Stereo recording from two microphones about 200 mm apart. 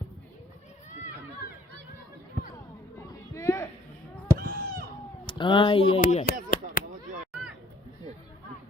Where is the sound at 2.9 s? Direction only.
15° left (ahead or behind).